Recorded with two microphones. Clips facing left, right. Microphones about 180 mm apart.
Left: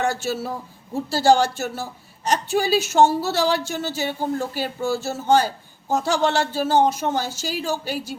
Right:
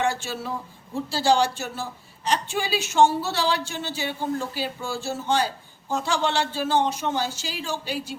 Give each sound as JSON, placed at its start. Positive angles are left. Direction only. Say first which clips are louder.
{"t": 0.0, "sound": "a woman's voice", "louder": "left 3 dB", "side_deg": 40}